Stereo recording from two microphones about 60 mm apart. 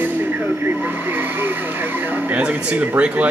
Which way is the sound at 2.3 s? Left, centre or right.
Centre.